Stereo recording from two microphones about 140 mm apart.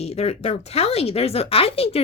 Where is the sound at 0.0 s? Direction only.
50° left (ahead or behind).